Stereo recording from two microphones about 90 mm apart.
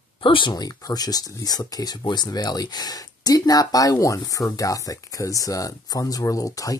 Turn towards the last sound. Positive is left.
turn(degrees=40)  # may be behind; listen again after turning